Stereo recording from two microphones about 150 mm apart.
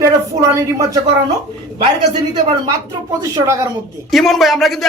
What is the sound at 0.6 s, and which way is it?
Speech, 20° right (ahead or behind).